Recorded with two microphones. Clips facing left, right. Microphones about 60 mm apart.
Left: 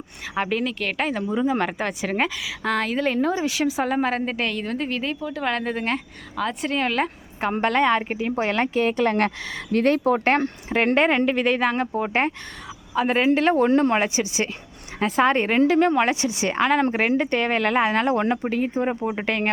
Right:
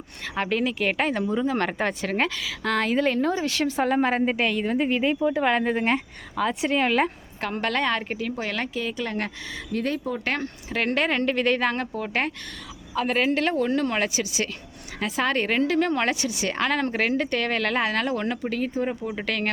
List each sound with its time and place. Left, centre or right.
0.3 s speech: centre
0.6 s a woman's voice: centre
1.3 s a woman's voice: centre
7.4 s speech: left
8.4 s speech: left
8.7 s speech: left
10.2 s speech: left; by 11.9 s centre
11.9 s speech: left
13.6 s speech: left
18.7 s speech: left